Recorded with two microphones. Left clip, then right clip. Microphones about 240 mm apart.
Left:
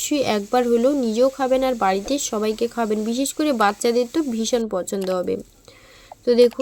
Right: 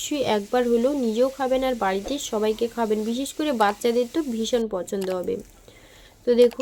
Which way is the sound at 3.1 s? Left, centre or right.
Left.